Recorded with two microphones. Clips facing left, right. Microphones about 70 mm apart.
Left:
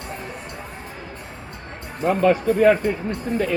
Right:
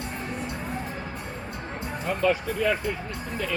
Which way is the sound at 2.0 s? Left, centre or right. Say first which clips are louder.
Left 8 dB; left.